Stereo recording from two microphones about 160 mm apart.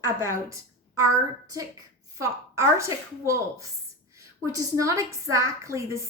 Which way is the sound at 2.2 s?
15° right (ahead or behind).